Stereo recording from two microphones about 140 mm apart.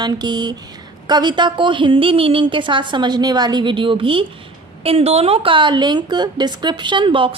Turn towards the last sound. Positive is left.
turn(degrees=-35)  # may be behind; listen again after turning